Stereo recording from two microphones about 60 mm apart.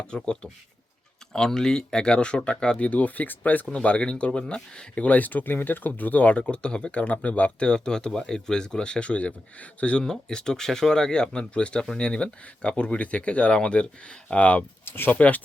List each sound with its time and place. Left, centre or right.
0.0 s speech: centre
3.7 s speech: centre
5.0 s speech: left
14.8 s speech: left